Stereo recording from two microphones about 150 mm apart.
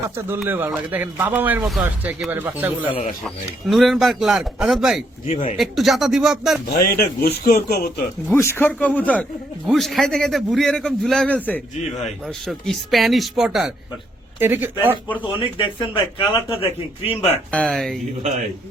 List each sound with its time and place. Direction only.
0.3 s a man's voice: 15° right (ahead or behind)
3.2 s a man's voice: centre (ahead or behind)
5.3 s speech: 45° left (ahead or behind)
5.5 s a man's voice: centre (ahead or behind)
6.7 s speech: 85° left
8.3 s a man's voice: 15° left (ahead or behind)
12.5 s a man's voice: centre (ahead or behind)
14.3 s a man's voice: 15° right (ahead or behind)
15.4 s a man's voice: 35° left (ahead or behind)
17.5 s a man's voice: 5° left (ahead or behind)